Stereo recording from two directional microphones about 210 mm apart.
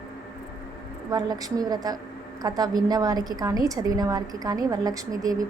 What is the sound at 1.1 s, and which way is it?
A woman's voice, 20° right (ahead or behind).